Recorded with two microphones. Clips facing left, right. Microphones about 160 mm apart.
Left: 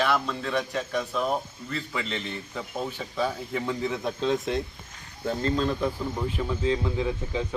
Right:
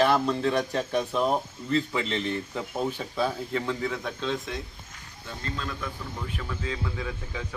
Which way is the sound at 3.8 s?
20° left (ahead or behind).